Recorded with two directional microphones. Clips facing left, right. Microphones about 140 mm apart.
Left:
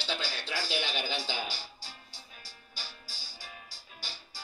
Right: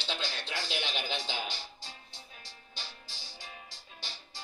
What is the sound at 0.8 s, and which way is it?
Music, 20° right (ahead or behind).